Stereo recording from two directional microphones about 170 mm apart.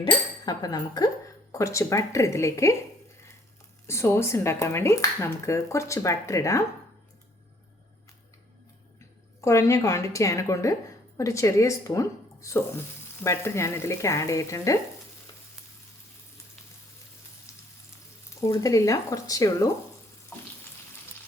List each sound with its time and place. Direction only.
0.0 s speech: 25° left (ahead or behind)
3.8 s speech: 15° left (ahead or behind)
9.0 s a woman's voice: 15° left (ahead or behind)
18.3 s speech: 20° left (ahead or behind)
20.3 s frying: 10° left (ahead or behind)